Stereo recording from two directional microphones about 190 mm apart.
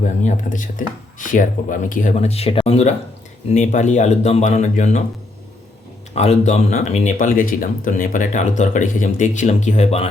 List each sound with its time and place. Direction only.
0.2 s speech: 40° left (ahead or behind)
6.1 s speech: 35° left (ahead or behind)